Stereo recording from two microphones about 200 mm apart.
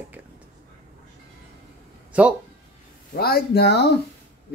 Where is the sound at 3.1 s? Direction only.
50° left (ahead or behind).